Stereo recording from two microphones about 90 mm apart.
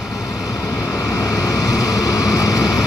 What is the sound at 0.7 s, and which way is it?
Vehicle, 30° left (ahead or behind).